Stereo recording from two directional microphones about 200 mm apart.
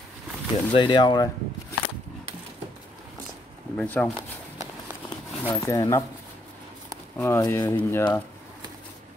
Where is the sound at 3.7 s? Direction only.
10° left (ahead or behind).